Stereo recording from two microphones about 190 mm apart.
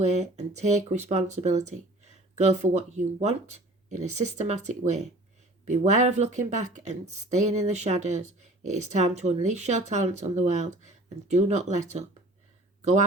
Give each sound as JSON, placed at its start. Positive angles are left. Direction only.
{"t": 0.0, "sound": "speech", "side_deg": -40}